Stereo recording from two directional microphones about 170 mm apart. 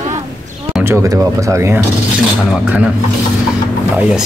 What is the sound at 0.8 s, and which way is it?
Speech, 15° right (ahead or behind).